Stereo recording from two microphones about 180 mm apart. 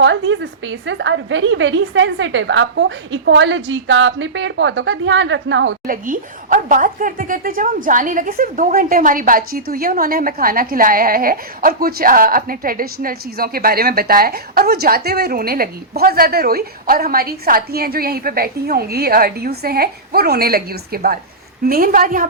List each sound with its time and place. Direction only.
0.0 s a woman's voice: 90° right
5.9 s a woman's voice: 50° right (ahead or behind)